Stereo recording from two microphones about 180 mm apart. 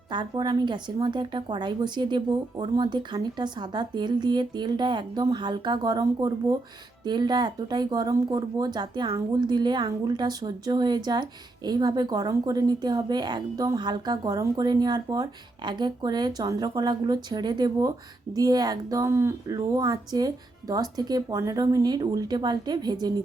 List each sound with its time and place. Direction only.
0.1 s speech: 25° right (ahead or behind)